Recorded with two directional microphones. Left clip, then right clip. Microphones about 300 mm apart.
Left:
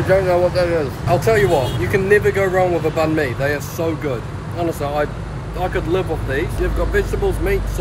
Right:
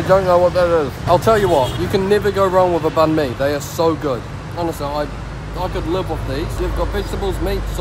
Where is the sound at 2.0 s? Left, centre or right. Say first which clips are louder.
Left 1 dB; centre.